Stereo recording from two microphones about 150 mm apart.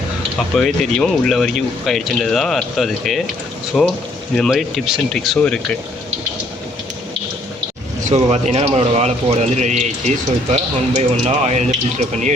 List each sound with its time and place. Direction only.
0.5 s speech: 5° left (ahead or behind)
8.1 s speech: 50° right (ahead or behind)